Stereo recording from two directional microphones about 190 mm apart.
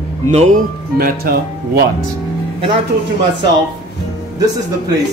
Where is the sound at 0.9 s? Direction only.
50° right (ahead or behind).